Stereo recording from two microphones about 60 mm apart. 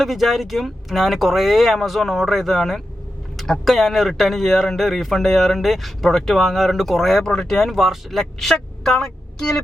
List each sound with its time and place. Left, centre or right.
0.0 s speech: centre